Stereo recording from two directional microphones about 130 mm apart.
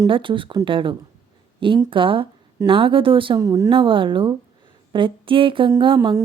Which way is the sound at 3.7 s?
40° right (ahead or behind).